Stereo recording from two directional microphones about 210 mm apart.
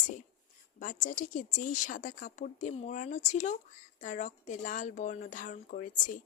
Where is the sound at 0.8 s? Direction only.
35° left (ahead or behind).